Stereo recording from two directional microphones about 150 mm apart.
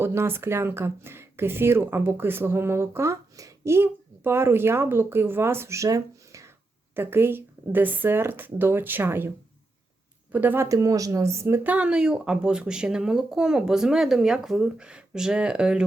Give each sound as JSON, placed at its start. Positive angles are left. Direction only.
{"t": 0.0, "sound": "speech", "side_deg": -15}
{"t": 10.3, "sound": "a woman's voice", "side_deg": -15}